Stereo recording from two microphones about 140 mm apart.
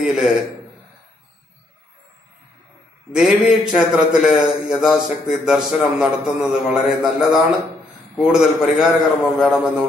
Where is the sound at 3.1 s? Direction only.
5° right (ahead or behind).